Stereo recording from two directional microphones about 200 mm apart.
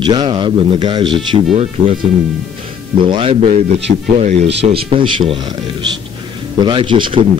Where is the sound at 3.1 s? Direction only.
25° right (ahead or behind).